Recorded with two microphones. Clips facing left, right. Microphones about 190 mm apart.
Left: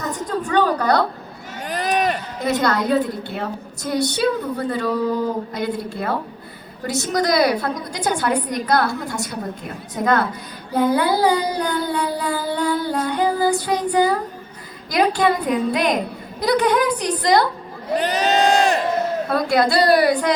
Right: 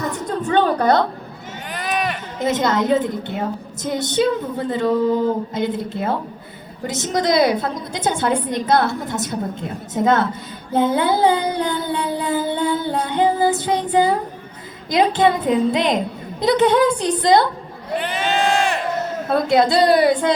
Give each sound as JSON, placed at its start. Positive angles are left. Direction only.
{"t": 0.4, "sound": "a sound", "side_deg": -25}
{"t": 1.6, "sound": "run", "side_deg": 40}
{"t": 2.4, "sound": "a woman's voice", "side_deg": -20}
{"t": 10.7, "sound": "music", "side_deg": -25}
{"t": 14.8, "sound": "a woman's voice", "side_deg": -25}
{"t": 17.9, "sound": "crowd", "side_deg": 40}
{"t": 19.3, "sound": "a woman's voice", "side_deg": -20}